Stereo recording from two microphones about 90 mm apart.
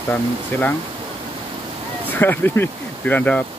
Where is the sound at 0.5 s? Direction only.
25° left (ahead or behind).